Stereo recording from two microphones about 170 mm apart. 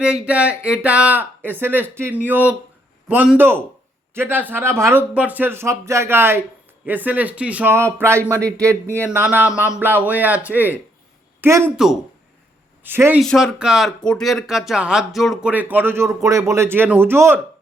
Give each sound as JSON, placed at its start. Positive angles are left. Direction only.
{"t": 0.0, "sound": "speech", "side_deg": -5}
{"t": 12.8, "sound": "speech", "side_deg": -10}
{"t": 13.2, "sound": "speech", "side_deg": 0}